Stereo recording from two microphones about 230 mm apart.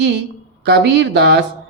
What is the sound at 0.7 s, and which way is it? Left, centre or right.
Speech, right.